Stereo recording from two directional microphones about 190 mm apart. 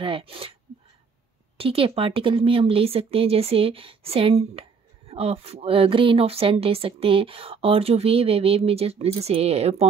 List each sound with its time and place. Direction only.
0.0 s speech: 30° right (ahead or behind)
1.6 s speech: 30° right (ahead or behind)